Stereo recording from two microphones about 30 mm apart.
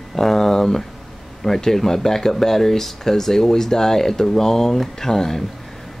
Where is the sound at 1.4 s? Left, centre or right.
Centre.